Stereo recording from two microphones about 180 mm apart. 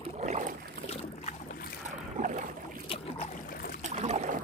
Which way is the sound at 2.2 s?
45° right (ahead or behind).